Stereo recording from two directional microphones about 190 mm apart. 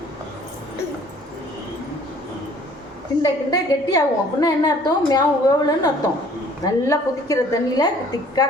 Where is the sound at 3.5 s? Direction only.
20° left (ahead or behind).